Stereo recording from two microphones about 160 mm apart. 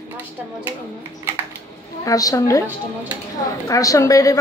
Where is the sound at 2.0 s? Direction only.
20° left (ahead or behind).